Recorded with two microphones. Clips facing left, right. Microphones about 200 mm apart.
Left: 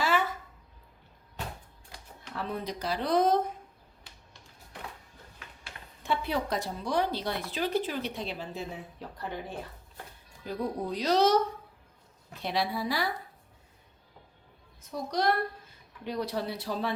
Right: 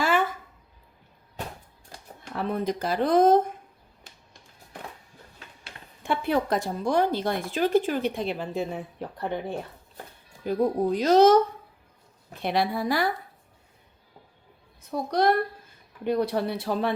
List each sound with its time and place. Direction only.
2.3 s speech: 55° right (ahead or behind)
6.0 s speech: 55° right (ahead or behind)
10.4 s speech: 50° right (ahead or behind)
14.8 s a woman's voice: 60° right (ahead or behind)